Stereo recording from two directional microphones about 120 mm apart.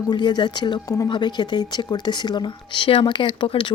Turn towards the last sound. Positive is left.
turn(degrees=45)  # may be behind; listen again after turning